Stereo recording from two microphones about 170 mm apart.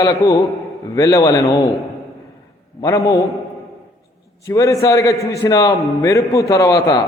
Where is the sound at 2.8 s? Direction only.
20° left (ahead or behind).